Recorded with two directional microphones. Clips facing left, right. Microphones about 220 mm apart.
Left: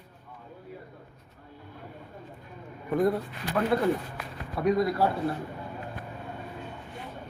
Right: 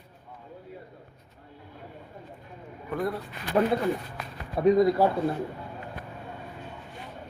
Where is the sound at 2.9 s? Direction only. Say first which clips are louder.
Left 5 dB; 20° left (ahead or behind).